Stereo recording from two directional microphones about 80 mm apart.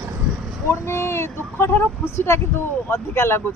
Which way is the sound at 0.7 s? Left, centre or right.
Left.